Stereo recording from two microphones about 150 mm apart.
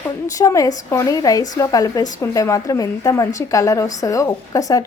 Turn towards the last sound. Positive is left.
turn(degrees=25)  # may be behind; listen again after turning